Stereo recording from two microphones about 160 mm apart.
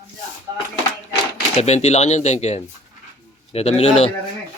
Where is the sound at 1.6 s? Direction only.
45° left (ahead or behind).